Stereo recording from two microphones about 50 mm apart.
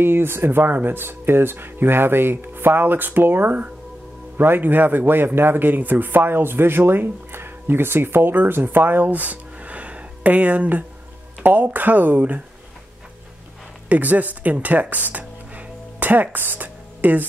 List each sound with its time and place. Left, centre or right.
0.0 s speech: right
13.8 s speech: right